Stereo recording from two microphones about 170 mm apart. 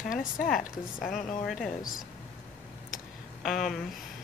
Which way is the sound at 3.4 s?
Centre (ahead or behind).